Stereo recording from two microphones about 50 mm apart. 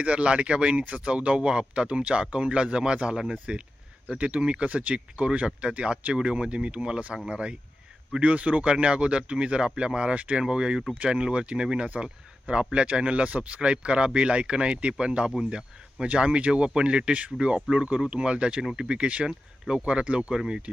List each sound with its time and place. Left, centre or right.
0.0 s speech: right
4.4 s speech: centre
4.7 s speech: right